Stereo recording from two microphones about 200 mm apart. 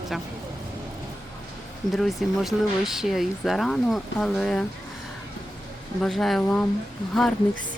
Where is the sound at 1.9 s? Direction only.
Centre (ahead or behind).